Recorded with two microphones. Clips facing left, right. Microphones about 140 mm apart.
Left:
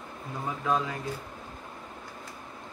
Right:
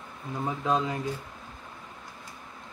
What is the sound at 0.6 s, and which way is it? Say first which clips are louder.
Speech: right 1 dB; 20° right (ahead or behind).